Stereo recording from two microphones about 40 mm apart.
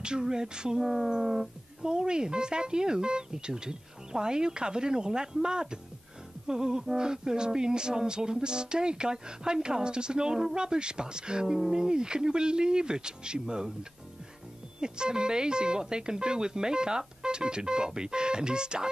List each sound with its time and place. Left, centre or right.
0.0 s speech: centre
14.8 s speech: centre